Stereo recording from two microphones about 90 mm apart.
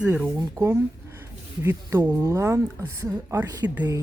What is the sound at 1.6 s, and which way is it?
Speech, 30° right (ahead or behind).